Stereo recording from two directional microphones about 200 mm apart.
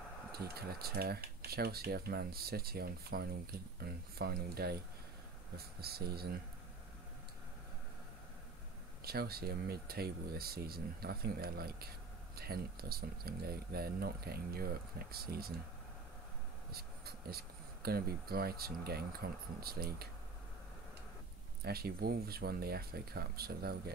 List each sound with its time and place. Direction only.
0.3 s speech: 50° right (ahead or behind)
9.0 s speech: 50° right (ahead or behind)
16.7 s speech: 50° right (ahead or behind)
21.6 s speech: 50° right (ahead or behind)